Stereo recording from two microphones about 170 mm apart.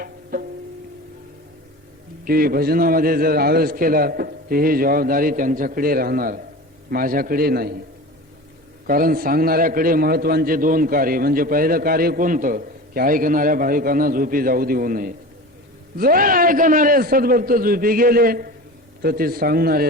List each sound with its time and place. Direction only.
0.0 s music: 60° right (ahead or behind)
2.2 s a man's voice: 60° right (ahead or behind)
8.9 s a man's voice: 55° right (ahead or behind)